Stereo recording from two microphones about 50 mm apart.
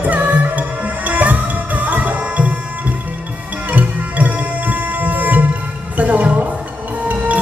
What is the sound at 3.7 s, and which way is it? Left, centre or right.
Music, right.